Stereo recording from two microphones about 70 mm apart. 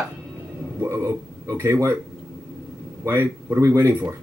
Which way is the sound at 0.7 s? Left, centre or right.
Right.